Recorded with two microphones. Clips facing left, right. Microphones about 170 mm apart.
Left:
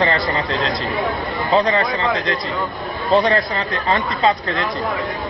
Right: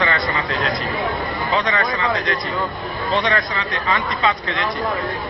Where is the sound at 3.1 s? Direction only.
35° left (ahead or behind).